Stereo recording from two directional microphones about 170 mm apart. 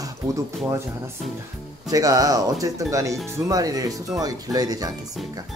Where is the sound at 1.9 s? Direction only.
20° right (ahead or behind).